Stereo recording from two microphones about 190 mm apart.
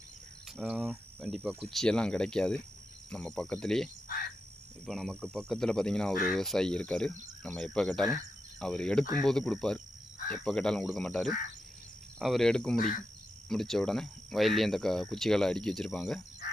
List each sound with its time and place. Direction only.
0.5 s speech: 5° right (ahead or behind)
4.9 s speech: centre (ahead or behind)
12.7 s cricket: 45° left (ahead or behind)
13.5 s speech: centre (ahead or behind)